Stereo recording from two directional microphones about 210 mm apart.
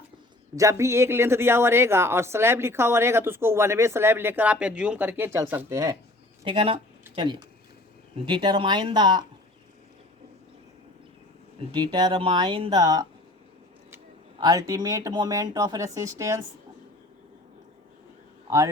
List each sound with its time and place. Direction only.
0.5 s speech: 15° right (ahead or behind)
6.4 s speech: 25° right (ahead or behind)
11.7 s speech: 20° right (ahead or behind)
14.3 s speech: 15° right (ahead or behind)